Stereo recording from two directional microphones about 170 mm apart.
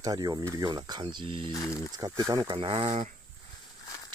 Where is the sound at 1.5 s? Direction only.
20° left (ahead or behind).